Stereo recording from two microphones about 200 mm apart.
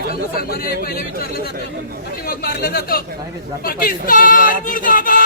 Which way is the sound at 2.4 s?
50° left (ahead or behind).